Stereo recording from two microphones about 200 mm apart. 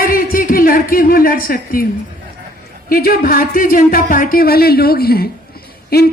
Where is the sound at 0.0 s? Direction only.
45° left (ahead or behind).